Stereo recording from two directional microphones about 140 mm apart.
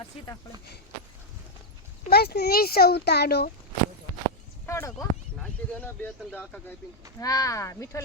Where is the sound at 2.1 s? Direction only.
90° left.